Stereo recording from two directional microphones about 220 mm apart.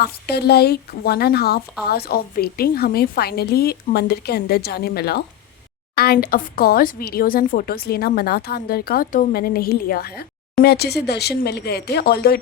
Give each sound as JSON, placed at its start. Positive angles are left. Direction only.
{"t": 0.0, "sound": "speech", "side_deg": 45}